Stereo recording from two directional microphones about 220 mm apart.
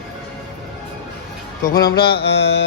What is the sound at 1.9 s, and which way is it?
Music, 45° left (ahead or behind).